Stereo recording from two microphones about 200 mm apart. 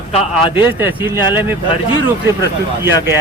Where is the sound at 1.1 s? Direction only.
20° left (ahead or behind).